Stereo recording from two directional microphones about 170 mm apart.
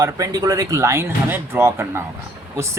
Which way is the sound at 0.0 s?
20° right (ahead or behind).